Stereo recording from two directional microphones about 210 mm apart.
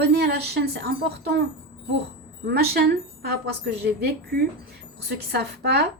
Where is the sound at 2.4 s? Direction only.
45° right (ahead or behind).